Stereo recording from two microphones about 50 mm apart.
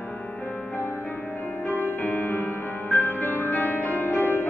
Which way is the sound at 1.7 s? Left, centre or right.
Left.